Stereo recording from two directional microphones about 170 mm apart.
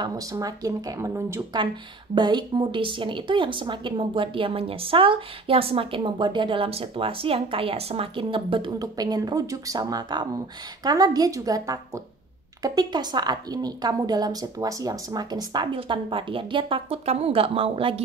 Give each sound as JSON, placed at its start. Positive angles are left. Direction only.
{"t": 0.0, "sound": "a woman's voice", "side_deg": -20}